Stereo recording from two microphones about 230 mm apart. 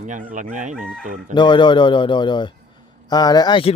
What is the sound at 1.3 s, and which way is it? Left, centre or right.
Speech, centre.